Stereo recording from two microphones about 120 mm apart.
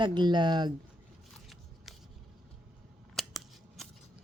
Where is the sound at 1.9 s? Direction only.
Centre (ahead or behind).